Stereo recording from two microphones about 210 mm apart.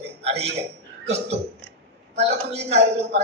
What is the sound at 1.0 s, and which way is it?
Burping, 30° right (ahead or behind).